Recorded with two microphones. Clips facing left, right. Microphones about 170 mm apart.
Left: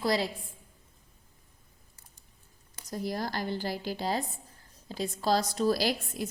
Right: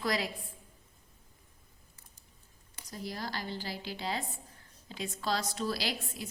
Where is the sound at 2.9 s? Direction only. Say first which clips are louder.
Left 6 dB; 45° left (ahead or behind).